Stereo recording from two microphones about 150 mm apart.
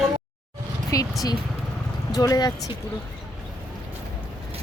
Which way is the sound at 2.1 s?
25° left (ahead or behind).